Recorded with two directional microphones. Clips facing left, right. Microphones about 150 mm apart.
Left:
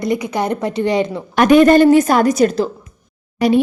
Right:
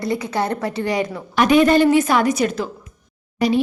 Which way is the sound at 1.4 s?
50° left (ahead or behind).